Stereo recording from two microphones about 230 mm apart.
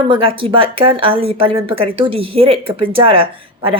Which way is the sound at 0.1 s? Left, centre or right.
Right.